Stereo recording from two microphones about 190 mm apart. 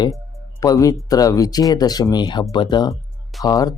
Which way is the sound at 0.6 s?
20° left (ahead or behind).